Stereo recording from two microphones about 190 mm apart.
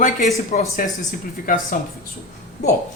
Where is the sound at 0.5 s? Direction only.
35° left (ahead or behind).